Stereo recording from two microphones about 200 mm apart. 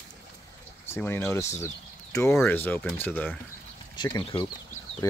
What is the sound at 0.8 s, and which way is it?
Speech, 10° left (ahead or behind).